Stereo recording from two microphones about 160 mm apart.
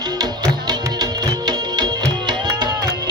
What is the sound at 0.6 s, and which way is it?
Music, 25° right (ahead or behind).